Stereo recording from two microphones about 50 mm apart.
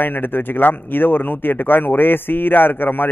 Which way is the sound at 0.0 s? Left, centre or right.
Left.